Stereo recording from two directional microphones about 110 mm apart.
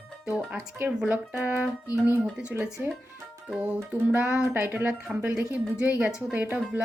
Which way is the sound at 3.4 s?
10° right (ahead or behind).